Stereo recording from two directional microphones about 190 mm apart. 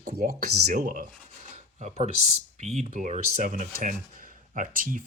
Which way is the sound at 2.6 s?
35° right (ahead or behind).